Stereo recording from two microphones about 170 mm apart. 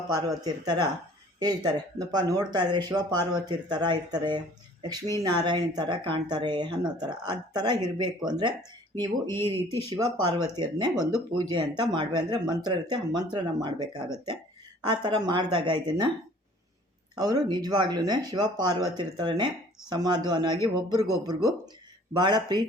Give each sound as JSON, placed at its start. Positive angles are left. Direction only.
{"t": 0.1, "sound": "speech", "side_deg": -20}
{"t": 9.9, "sound": "speech", "side_deg": -25}
{"t": 17.2, "sound": "speech", "side_deg": -25}